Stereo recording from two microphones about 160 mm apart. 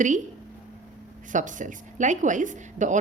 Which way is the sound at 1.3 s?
50° right (ahead or behind).